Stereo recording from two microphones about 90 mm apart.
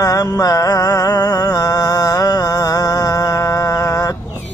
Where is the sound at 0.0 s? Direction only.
40° left (ahead or behind).